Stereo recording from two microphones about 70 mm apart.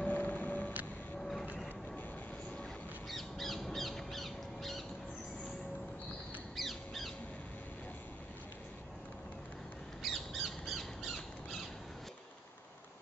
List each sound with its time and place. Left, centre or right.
0.0 s music: left
3.1 s crow: centre
6.5 s squawk: centre
10.0 s squawk: centre